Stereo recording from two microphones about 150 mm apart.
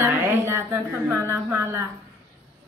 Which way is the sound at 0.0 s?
15° right (ahead or behind).